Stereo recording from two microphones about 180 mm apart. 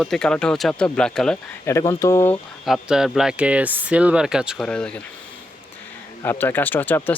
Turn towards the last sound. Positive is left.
turn(degrees=10)  # may be behind; listen again after turning